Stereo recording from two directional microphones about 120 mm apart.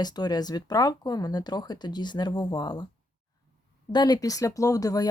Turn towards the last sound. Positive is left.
turn(degrees=30)  # may be behind; listen again after turning